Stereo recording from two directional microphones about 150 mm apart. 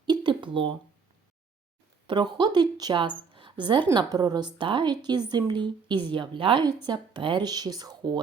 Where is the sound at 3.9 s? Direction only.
30° right (ahead or behind).